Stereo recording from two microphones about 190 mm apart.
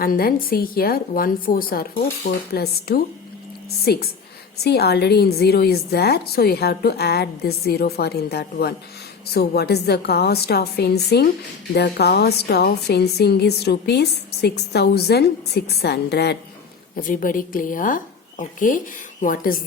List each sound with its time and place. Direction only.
0.0 s a woman's voice: 50° left (ahead or behind)
17.0 s a woman's voice: 45° left (ahead or behind)